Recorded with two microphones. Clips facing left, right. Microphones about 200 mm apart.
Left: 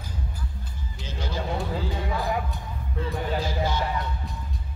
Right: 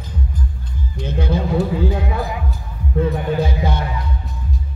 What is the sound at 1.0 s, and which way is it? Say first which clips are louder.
Music: right 11 dB; 55° right (ahead or behind).